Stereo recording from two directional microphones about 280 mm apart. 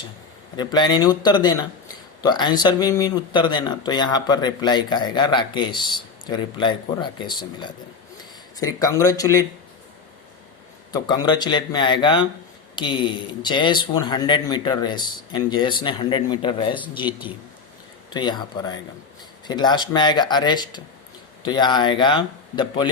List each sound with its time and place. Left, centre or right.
0.5 s speech: centre
10.9 s speech: centre
17.1 s speech: centre
18.1 s speech: centre